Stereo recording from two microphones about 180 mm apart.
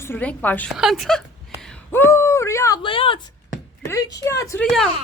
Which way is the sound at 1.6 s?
5° left (ahead or behind).